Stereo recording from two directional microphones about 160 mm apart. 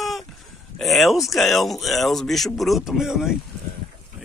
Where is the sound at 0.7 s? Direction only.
Centre (ahead or behind).